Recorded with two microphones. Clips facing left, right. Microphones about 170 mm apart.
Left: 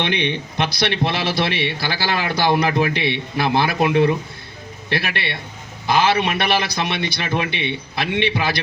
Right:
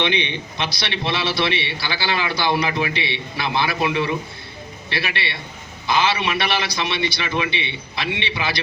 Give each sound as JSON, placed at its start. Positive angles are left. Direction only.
{"t": 0.0, "sound": "a man's voice", "side_deg": 55}